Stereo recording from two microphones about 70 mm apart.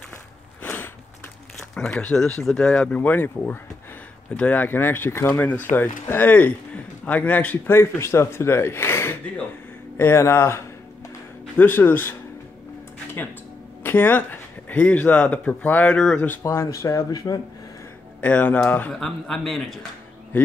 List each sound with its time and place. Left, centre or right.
0.6 s a sound: left
1.8 s speech: centre
7.7 s speech: left
11.5 s speech: left
13.8 s speech: left
16.4 s speech: left
18.2 s speech: left
18.9 s a man's voice: centre